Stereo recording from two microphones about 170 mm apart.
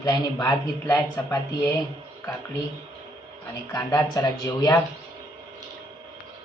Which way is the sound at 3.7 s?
20° left (ahead or behind).